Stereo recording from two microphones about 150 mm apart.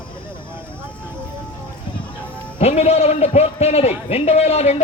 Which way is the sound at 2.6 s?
45° left (ahead or behind).